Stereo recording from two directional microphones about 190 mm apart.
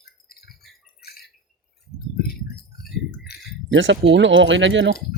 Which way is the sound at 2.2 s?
50° left (ahead or behind).